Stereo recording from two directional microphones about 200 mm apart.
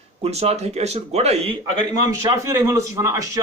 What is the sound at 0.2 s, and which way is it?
Speech, 30° right (ahead or behind).